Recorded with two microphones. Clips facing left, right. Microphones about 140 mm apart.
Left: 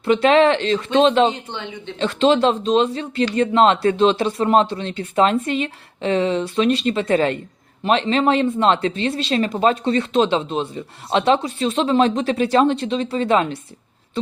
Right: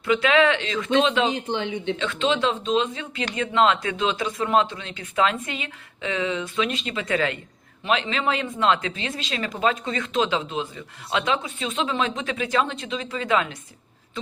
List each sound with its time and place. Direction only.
0.0 s speech: 35° left (ahead or behind)